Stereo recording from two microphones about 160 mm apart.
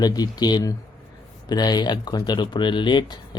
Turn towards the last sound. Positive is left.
turn(degrees=30)  # may be behind; listen again after turning